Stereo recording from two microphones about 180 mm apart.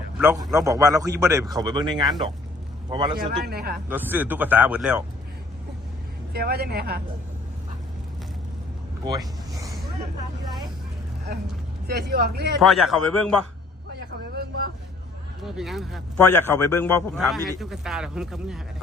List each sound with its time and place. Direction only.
0.5 s a man's voice: 20° right (ahead or behind)
3.4 s speech: 60° right (ahead or behind)
3.8 s speech: 10° right (ahead or behind)
6.3 s speech: 60° right (ahead or behind)
9.0 s speech: 20° right (ahead or behind)
11.9 s speech: 65° right (ahead or behind)
12.6 s speech: centre (ahead or behind)
14.3 s vehicle: 65° right (ahead or behind)
15.4 s speech: centre (ahead or behind)
16.1 s a man's voice: 10° left (ahead or behind)
17.2 s speech: centre (ahead or behind)